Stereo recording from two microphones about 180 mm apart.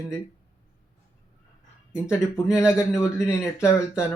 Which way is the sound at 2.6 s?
15° left (ahead or behind).